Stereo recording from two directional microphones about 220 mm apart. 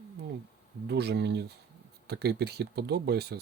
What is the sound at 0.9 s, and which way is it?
Speech, 50° right (ahead or behind).